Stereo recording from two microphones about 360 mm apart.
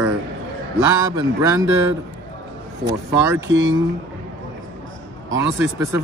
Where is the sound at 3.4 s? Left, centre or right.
Right.